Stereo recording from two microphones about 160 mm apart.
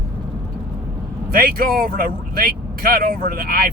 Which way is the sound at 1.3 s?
65° right (ahead or behind).